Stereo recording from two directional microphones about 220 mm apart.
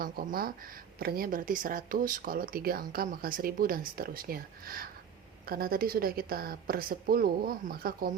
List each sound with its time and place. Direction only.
0.0 s a woman's voice: 40° right (ahead or behind)